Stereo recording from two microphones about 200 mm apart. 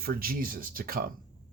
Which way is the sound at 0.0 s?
45° right (ahead or behind).